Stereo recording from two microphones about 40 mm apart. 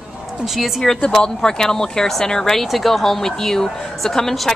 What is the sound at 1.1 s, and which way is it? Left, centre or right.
A woman's voice, centre.